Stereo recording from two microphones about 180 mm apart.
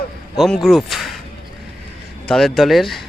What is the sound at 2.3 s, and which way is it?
Speech, centre (ahead or behind).